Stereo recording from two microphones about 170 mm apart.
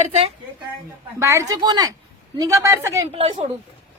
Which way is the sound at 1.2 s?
15° right (ahead or behind).